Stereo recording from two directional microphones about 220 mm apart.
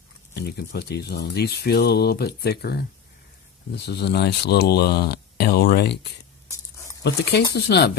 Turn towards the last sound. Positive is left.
turn(degrees=50)  # may be behind; listen again after turning